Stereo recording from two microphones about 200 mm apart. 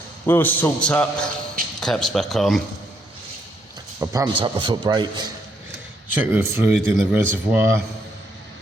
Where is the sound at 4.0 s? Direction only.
15° right (ahead or behind).